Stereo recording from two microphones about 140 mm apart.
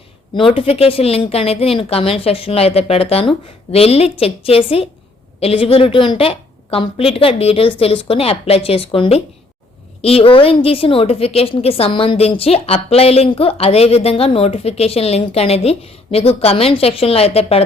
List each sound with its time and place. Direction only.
0.3 s a woman's voice: 40° left (ahead or behind)